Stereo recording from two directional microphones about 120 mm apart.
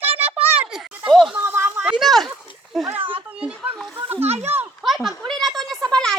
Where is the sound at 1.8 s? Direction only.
10° right (ahead or behind).